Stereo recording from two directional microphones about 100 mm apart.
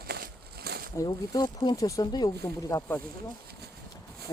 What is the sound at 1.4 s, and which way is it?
Speech, 45° left (ahead or behind).